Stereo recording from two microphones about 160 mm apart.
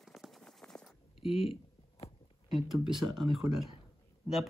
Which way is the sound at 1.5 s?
40° left (ahead or behind).